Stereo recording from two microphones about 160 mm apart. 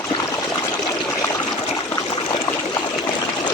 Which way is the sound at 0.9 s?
Centre (ahead or behind).